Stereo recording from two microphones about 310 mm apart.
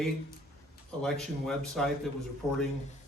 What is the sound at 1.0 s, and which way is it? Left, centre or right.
Speech, centre.